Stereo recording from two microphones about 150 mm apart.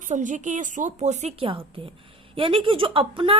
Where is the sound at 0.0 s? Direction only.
55° right (ahead or behind).